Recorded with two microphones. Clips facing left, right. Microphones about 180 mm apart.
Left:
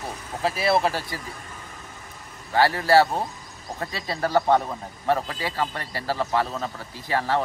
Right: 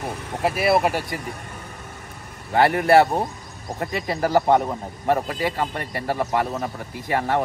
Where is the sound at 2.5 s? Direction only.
20° right (ahead or behind).